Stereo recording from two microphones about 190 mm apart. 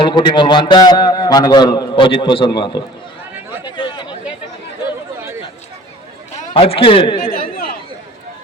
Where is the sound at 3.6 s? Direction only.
25° left (ahead or behind).